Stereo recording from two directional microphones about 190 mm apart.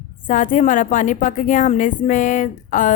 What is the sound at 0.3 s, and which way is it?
A woman's voice, 45° left (ahead or behind).